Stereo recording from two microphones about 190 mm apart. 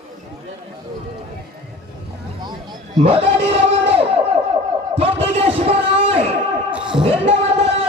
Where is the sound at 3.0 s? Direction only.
30° right (ahead or behind).